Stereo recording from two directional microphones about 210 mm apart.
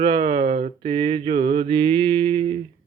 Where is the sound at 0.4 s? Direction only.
40° right (ahead or behind).